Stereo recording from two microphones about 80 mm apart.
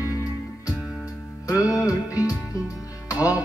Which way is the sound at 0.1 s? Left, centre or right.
Left.